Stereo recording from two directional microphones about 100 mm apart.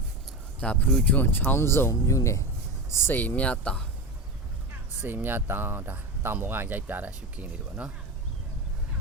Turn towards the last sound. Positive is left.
turn(degrees=-15)  # may be behind; listen again after turning